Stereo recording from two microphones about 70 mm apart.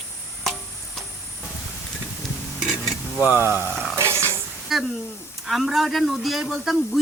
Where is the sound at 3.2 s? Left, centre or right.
Right.